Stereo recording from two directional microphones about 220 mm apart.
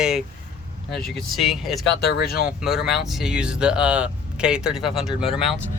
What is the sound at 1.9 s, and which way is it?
Speech, 50° left (ahead or behind).